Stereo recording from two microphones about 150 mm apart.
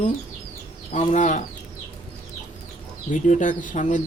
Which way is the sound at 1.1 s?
55° left (ahead or behind).